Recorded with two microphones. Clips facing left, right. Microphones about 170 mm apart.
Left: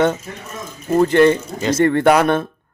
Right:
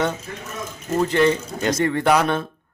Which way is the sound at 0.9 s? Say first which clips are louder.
Left 6 dB; 55° left (ahead or behind).